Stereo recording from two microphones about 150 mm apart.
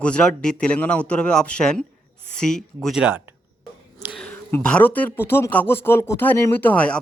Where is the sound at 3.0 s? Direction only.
15° right (ahead or behind).